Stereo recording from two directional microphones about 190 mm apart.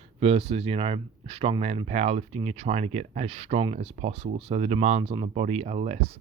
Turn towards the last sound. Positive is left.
turn(degrees=-35)  # may be behind; listen again after turning